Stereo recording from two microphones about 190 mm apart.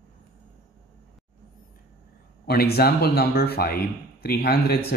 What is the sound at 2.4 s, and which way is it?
Speech, 55° left (ahead or behind).